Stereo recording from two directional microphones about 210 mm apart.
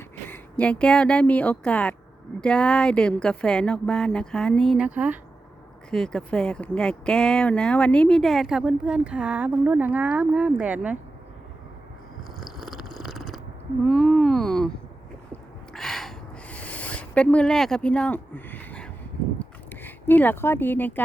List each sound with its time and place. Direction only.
0.3 s speech: 5° left (ahead or behind)
12.4 s purr: centre (ahead or behind)
13.8 s speech: centre (ahead or behind)
15.3 s a sound: centre (ahead or behind)